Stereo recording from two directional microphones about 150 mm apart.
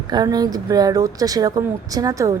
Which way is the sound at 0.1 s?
25° right (ahead or behind).